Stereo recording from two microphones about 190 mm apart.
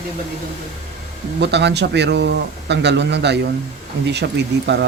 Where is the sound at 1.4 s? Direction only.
65° right (ahead or behind).